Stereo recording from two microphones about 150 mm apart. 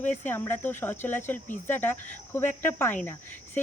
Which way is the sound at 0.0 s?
10° left (ahead or behind).